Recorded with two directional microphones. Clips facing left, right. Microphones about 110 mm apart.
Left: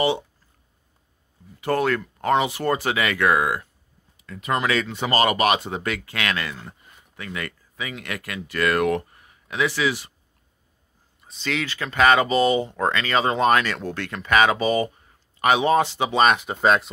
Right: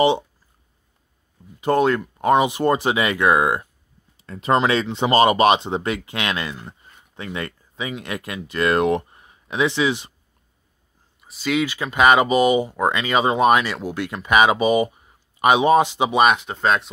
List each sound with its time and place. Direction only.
1.6 s speech: 20° right (ahead or behind)
11.2 s speech: 10° right (ahead or behind)
16.3 s speech: 5° left (ahead or behind)